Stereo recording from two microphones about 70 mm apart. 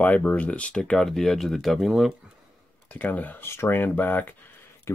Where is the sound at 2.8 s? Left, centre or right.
Left.